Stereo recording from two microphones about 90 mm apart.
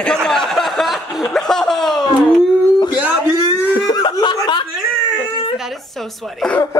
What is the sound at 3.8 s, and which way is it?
Chuckle, 55° left (ahead or behind).